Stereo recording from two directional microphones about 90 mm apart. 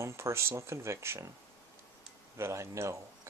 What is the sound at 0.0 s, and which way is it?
Speech, 30° right (ahead or behind).